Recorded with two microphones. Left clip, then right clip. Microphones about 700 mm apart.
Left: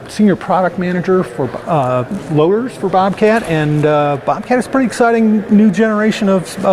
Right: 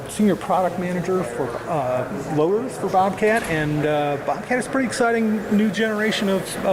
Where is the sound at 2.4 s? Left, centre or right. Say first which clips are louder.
Left 8 dB; left.